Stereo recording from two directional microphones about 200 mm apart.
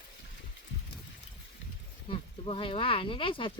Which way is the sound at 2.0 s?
25° left (ahead or behind).